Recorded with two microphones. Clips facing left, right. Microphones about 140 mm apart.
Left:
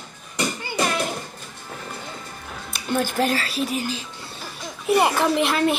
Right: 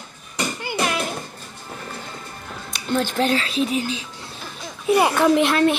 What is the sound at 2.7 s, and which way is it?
Speech, 5° left (ahead or behind).